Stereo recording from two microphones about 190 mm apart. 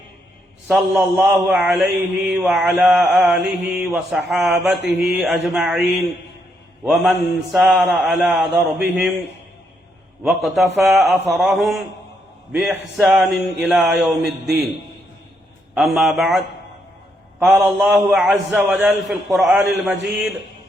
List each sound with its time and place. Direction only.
0.7 s mantra: centre (ahead or behind)
4.8 s mantra: 60° right (ahead or behind)
5.0 s mantra: centre (ahead or behind)
10.2 s mantra: centre (ahead or behind)
15.7 s mantra: centre (ahead or behind)
17.4 s mantra: 5° right (ahead or behind)